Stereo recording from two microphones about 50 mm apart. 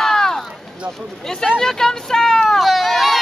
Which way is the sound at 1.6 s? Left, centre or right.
Centre.